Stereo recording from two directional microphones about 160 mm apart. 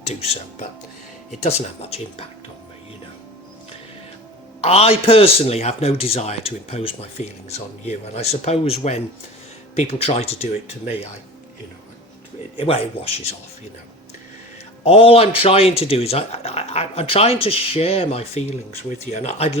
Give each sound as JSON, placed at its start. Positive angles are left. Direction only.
{"t": 0.0, "sound": "a man's voice", "side_deg": 40}
{"t": 1.5, "sound": "a man's voice", "side_deg": 40}
{"t": 4.6, "sound": "a man's voice", "side_deg": 40}
{"t": 12.5, "sound": "a man's voice", "side_deg": 40}
{"t": 14.8, "sound": "a man's voice", "side_deg": 35}